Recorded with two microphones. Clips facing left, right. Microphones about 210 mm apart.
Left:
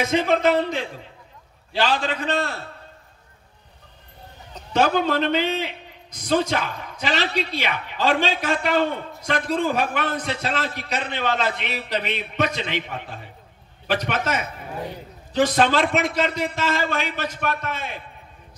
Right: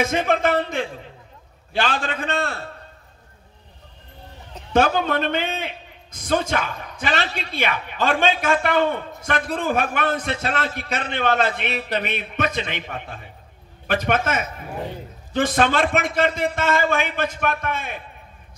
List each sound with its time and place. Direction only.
0.0 s a man's voice: 50° right (ahead or behind)
4.7 s a man's voice: 50° right (ahead or behind)
13.8 s a man's voice: 50° right (ahead or behind)